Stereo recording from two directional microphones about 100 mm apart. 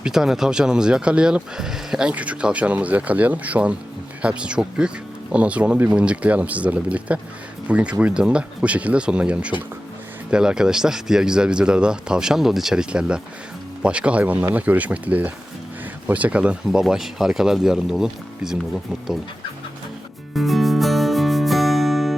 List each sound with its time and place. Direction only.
0.0 s speech: 5° right (ahead or behind)
20.3 s music: centre (ahead or behind)